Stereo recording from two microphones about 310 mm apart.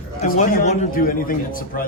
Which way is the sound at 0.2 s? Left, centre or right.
Left.